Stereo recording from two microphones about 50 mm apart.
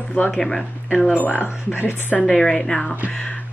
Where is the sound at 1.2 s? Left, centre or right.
Left.